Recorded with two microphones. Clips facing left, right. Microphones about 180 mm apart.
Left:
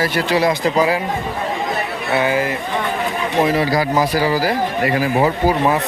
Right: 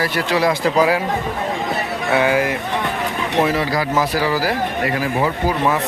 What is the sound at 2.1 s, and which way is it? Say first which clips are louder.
Speech: right 1 dB; 10° right (ahead or behind).